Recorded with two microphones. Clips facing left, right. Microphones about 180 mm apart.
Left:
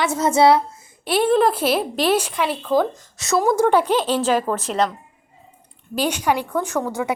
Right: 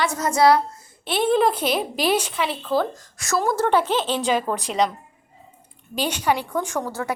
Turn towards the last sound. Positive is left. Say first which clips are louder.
# left 3 dB
turn(degrees=10)  # may be behind; listen again after turning